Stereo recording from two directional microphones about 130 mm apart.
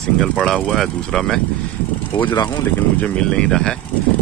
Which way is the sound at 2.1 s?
35° left (ahead or behind).